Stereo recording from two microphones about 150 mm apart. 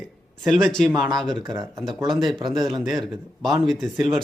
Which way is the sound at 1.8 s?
Centre (ahead or behind).